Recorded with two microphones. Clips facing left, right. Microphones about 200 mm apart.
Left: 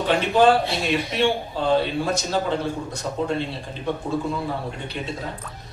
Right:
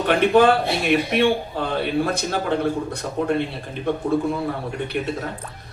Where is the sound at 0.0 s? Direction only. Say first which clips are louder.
Right 2 dB; 60° right (ahead or behind).